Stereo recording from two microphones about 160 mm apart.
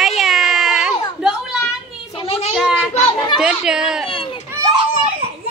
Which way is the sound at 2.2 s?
40° left (ahead or behind).